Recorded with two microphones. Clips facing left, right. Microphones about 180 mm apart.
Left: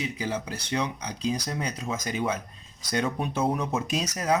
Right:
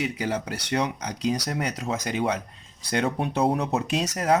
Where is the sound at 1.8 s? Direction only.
65° right (ahead or behind).